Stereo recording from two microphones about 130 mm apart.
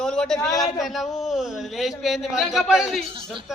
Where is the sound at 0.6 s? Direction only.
Centre (ahead or behind).